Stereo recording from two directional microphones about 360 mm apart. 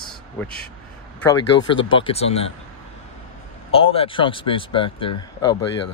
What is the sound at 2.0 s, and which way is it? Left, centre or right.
Speech, centre.